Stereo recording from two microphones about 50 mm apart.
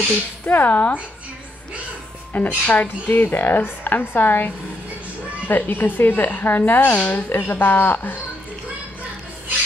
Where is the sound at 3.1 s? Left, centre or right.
Left.